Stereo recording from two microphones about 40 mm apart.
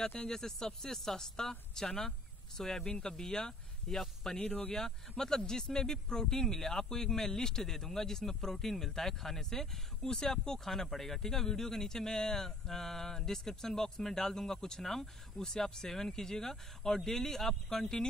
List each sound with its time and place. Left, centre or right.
0.3 s speech: centre
4.4 s speech: left
4.7 s speech: centre